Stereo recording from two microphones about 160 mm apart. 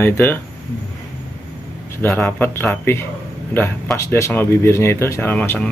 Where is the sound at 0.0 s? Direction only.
15° left (ahead or behind).